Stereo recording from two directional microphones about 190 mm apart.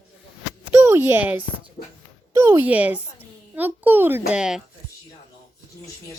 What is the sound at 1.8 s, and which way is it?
Speech, 50° left (ahead or behind).